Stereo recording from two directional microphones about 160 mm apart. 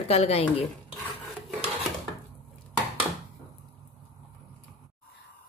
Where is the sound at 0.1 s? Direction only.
40° left (ahead or behind).